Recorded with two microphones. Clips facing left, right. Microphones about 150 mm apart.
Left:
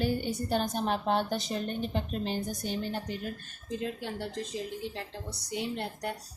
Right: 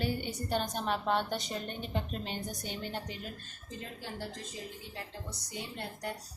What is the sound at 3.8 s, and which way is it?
Speech, 65° left (ahead or behind).